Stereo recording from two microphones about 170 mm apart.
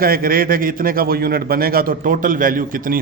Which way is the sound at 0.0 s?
60° right (ahead or behind).